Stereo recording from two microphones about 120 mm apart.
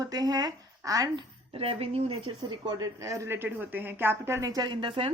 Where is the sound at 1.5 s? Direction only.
50° right (ahead or behind).